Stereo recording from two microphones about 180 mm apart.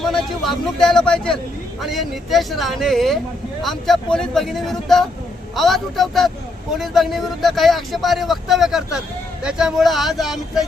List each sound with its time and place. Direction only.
0.0 s speech: centre (ahead or behind)